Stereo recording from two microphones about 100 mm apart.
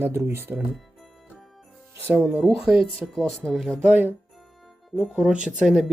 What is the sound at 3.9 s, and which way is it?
Speech, 20° right (ahead or behind).